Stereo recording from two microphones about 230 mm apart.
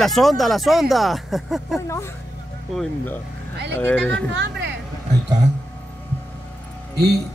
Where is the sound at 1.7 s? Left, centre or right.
Centre.